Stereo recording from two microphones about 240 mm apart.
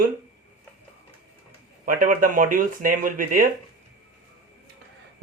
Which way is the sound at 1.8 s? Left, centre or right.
Right.